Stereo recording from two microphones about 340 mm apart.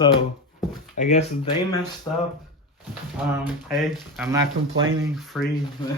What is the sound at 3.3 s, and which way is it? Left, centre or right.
Speech, centre.